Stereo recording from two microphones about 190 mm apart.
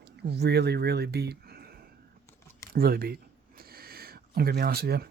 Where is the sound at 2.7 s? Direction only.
55° right (ahead or behind).